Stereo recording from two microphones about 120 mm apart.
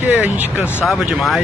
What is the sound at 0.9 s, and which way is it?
Speech, centre (ahead or behind).